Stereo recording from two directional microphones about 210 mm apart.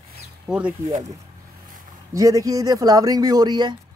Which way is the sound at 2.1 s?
15° right (ahead or behind).